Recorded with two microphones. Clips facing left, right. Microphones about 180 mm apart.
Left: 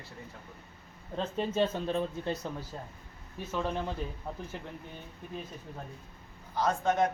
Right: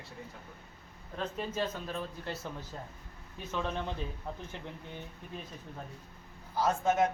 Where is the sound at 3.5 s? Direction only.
10° left (ahead or behind).